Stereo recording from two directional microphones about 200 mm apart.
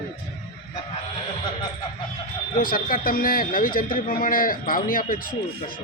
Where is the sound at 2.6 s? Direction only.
45° left (ahead or behind).